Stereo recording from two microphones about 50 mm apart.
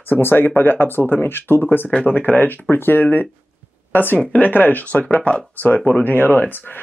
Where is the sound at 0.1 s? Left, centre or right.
Left.